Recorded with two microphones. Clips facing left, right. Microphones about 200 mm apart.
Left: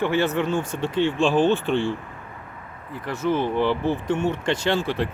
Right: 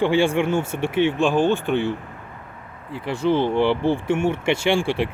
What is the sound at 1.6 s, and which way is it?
Speech, 60° right (ahead or behind).